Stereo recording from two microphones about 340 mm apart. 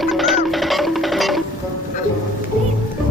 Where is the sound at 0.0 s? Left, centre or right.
Centre.